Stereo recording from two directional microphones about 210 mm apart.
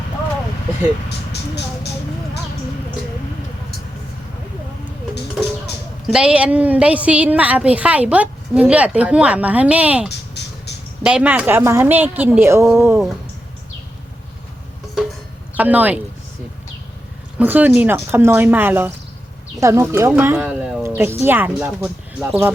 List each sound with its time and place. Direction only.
1.3 s speech: 50° left (ahead or behind)
6.1 s a woman's voice: 5° right (ahead or behind)
10.1 s a sound: 55° left (ahead or behind)
11.0 s a woman's voice: 5° right (ahead or behind)
15.5 s a woman's voice: 10° right (ahead or behind)
17.3 s a woman's voice: 10° right (ahead or behind)